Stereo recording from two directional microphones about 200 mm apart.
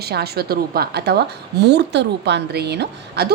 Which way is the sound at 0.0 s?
55° right (ahead or behind).